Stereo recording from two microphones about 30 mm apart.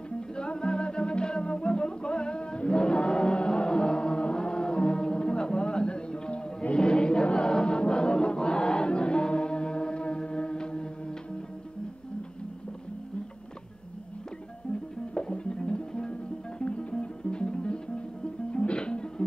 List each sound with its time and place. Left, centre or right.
0.4 s music: left
6.7 s a sound: left
7.2 s choir: left
14.7 s music: left